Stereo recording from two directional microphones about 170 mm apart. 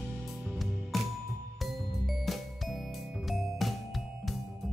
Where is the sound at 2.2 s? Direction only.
Centre (ahead or behind).